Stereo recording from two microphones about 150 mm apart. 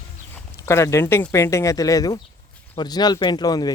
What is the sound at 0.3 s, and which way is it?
A man's voice, 20° left (ahead or behind).